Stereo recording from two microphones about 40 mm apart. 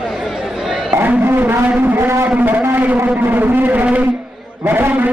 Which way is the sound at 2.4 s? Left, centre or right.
Right.